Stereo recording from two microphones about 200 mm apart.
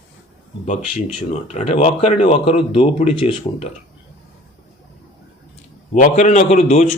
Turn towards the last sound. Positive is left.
turn(degrees=35)  # may be behind; listen again after turning